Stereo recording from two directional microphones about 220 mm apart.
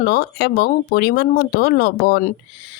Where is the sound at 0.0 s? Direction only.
45° left (ahead or behind).